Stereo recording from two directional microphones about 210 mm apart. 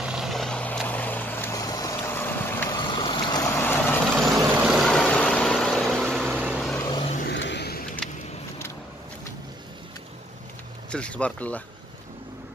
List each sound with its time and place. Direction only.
0.0 s vehicle: centre (ahead or behind)
2.8 s vehicle: 20° left (ahead or behind)
3.4 s vehicle: 10° left (ahead or behind)
4.4 s vehicle: 5° right (ahead or behind)
6.2 s a sound: 5° right (ahead or behind)
6.8 s vehicle: 20° left (ahead or behind)
7.3 s vehicle: 55° left (ahead or behind)
8.0 s vehicle: centre (ahead or behind)
10.9 s speech: 5° left (ahead or behind)